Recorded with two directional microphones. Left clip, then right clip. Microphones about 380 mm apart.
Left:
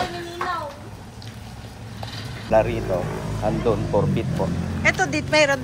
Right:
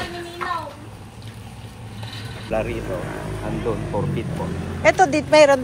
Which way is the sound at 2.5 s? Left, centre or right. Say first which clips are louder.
Left 6 dB; left.